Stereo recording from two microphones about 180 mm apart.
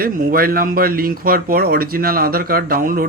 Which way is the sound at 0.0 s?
55° right (ahead or behind).